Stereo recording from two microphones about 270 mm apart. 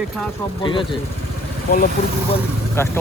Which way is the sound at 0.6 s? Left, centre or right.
Centre.